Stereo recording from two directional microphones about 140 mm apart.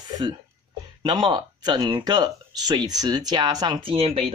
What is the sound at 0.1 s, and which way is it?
Speech, 30° right (ahead or behind).